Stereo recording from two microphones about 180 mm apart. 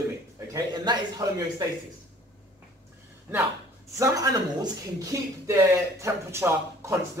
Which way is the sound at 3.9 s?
20° right (ahead or behind).